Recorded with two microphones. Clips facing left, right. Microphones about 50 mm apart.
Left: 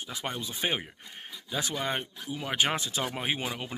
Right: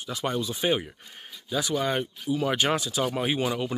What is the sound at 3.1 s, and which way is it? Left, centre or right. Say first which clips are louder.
Speech: right 5 dB; centre.